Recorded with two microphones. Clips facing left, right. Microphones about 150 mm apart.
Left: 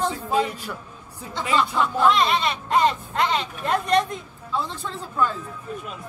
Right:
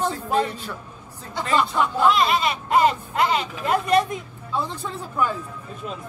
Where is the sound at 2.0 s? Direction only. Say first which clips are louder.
Even; centre (ahead or behind).